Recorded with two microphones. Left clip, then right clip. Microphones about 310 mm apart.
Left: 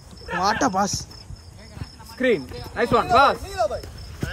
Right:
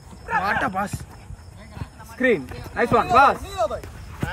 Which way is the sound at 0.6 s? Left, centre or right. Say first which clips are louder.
Left 4 dB; centre.